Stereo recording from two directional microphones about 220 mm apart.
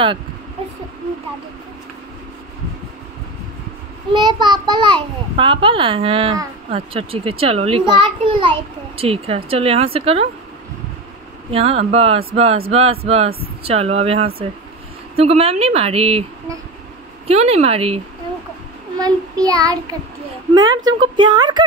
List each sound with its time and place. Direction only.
4.1 s a woman's voice: 20° right (ahead or behind)
11.5 s a woman's voice: 25° right (ahead or behind)
17.3 s a woman's voice: 30° right (ahead or behind)
18.9 s child singing: 15° right (ahead or behind)
20.5 s a woman's voice: 15° right (ahead or behind)